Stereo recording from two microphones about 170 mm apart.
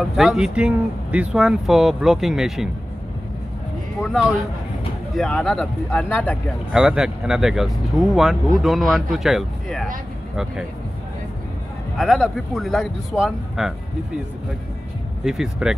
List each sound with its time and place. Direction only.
0.1 s speech: centre (ahead or behind)
4.0 s speech: centre (ahead or behind)
6.7 s speech: 5° right (ahead or behind)
12.0 s speech: centre (ahead or behind)
15.2 s speech: 5° right (ahead or behind)